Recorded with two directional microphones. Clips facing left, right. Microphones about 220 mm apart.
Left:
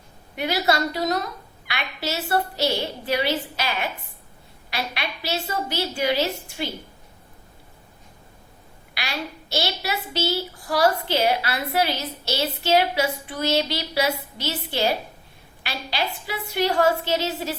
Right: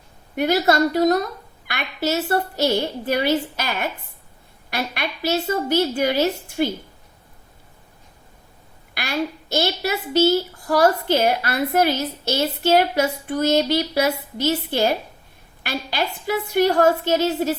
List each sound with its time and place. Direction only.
0.3 s a woman's voice: 45° right (ahead or behind)
9.0 s a woman's voice: 50° right (ahead or behind)